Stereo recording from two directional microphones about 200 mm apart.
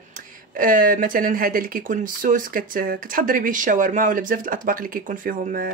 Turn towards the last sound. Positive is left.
turn(degrees=-45)  # may be behind; listen again after turning